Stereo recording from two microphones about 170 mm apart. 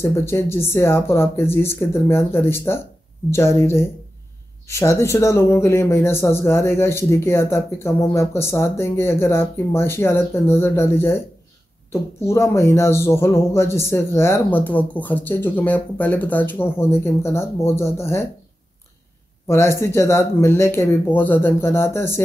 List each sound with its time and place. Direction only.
0.0 s speech: 15° left (ahead or behind)
19.4 s speech: 15° left (ahead or behind)